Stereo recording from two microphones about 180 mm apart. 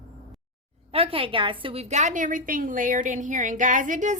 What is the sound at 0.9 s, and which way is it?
A woman's voice, 30° right (ahead or behind).